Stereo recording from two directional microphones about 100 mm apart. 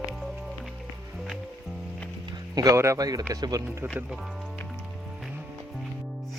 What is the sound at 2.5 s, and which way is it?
Speech, 35° right (ahead or behind).